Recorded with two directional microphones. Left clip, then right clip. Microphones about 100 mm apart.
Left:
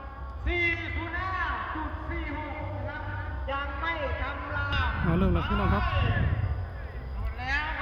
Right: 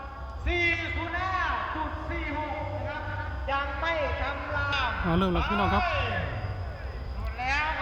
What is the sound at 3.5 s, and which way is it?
Speech, centre (ahead or behind).